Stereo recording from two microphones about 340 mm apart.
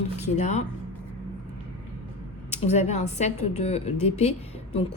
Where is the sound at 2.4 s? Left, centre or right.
Centre.